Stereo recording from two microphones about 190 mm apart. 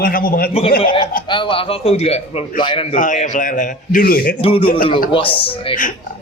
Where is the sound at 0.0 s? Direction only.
50° left (ahead or behind).